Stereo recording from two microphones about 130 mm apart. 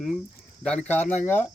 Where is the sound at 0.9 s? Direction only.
10° left (ahead or behind).